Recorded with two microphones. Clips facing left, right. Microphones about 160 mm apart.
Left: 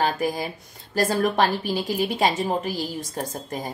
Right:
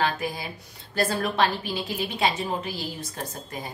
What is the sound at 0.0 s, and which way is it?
A woman's voice, 45° left (ahead or behind).